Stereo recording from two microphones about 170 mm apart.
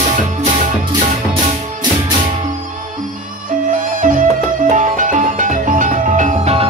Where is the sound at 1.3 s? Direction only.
25° right (ahead or behind).